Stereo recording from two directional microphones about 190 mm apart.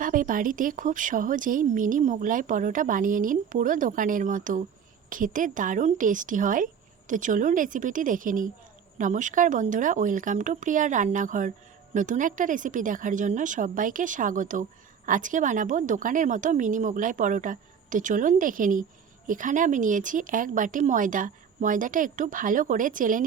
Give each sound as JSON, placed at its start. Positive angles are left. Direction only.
{"t": 0.0, "sound": "speech", "side_deg": -45}